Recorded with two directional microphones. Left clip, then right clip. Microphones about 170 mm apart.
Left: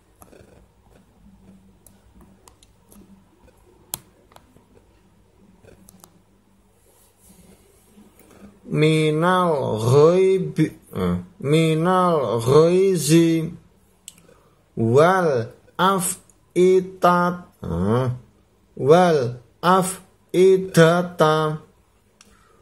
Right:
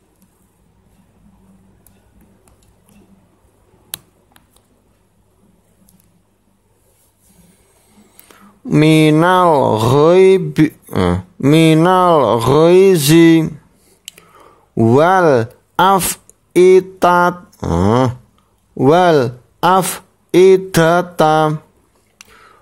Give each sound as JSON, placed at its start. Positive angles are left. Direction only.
{"t": 8.6, "sound": "speech", "side_deg": -60}
{"t": 14.9, "sound": "speech", "side_deg": -60}
{"t": 16.5, "sound": "a sound", "side_deg": -60}
{"t": 18.8, "sound": "speech", "side_deg": -60}